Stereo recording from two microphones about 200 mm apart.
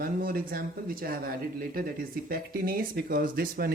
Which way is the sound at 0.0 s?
45° right (ahead or behind).